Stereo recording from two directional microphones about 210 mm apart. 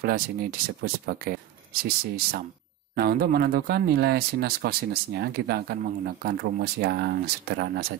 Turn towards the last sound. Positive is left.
turn(degrees=-50)  # may be behind; listen again after turning